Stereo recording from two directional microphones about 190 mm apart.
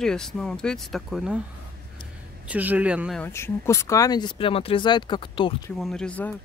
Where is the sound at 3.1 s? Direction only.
10° left (ahead or behind).